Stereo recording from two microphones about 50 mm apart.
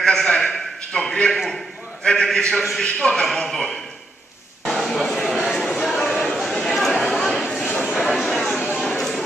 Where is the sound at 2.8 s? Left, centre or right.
Centre.